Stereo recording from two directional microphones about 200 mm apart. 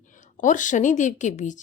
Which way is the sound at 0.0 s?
40° left (ahead or behind).